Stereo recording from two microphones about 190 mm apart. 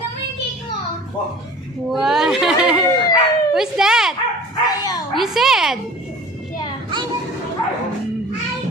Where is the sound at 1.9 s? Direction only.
Centre (ahead or behind).